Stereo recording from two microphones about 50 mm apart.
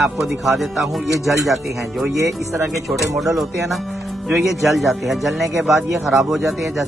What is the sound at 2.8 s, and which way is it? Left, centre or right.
Speech, centre.